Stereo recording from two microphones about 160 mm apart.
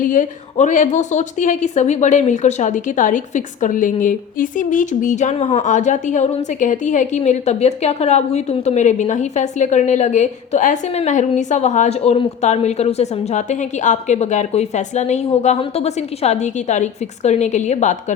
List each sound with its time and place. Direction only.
0.0 s a woman's voice: 55° left (ahead or behind)